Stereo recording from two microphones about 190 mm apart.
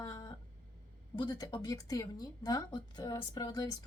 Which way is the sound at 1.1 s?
20° left (ahead or behind).